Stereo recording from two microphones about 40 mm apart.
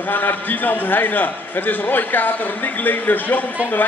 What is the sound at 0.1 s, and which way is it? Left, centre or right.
Speech, left.